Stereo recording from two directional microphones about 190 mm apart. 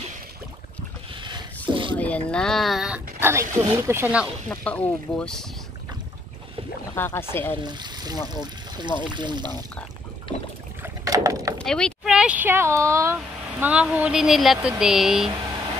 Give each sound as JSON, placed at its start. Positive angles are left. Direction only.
{"t": 1.2, "sound": "zipper", "side_deg": -25}
{"t": 2.0, "sound": "speech", "side_deg": 5}
{"t": 4.5, "sound": "speech", "side_deg": 10}
{"t": 7.0, "sound": "speech", "side_deg": 10}
{"t": 7.6, "sound": "speech", "side_deg": -20}
{"t": 10.8, "sound": "rowboat", "side_deg": -15}
{"t": 11.5, "sound": "speech", "side_deg": 5}